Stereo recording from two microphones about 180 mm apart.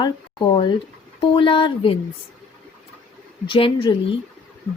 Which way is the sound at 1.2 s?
30° left (ahead or behind).